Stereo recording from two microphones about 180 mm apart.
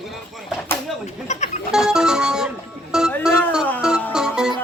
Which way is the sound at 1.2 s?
40° left (ahead or behind).